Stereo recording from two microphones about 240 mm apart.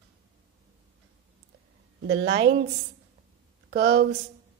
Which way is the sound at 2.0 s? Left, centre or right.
Right.